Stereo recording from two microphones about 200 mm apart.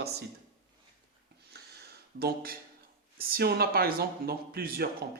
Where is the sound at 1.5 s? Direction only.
55° right (ahead or behind).